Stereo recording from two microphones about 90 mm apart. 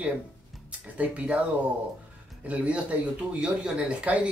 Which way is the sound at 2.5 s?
15° right (ahead or behind).